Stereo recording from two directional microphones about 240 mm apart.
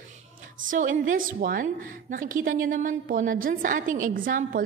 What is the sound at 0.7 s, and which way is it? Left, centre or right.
A woman's voice, right.